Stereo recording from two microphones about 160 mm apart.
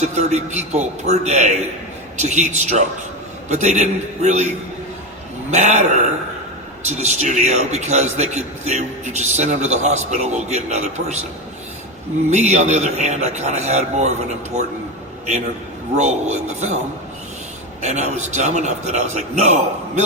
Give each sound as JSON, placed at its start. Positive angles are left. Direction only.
{"t": 0.0, "sound": "a man's voice", "side_deg": -45}
{"t": 12.3, "sound": "a man's voice", "side_deg": -45}
{"t": 16.0, "sound": "a man's voice", "side_deg": -45}
{"t": 17.8, "sound": "a man's voice", "side_deg": -45}